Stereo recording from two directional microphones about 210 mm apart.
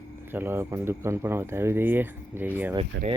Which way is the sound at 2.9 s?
60° right (ahead or behind).